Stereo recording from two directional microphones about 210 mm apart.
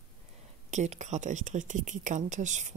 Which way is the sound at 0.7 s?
35° right (ahead or behind).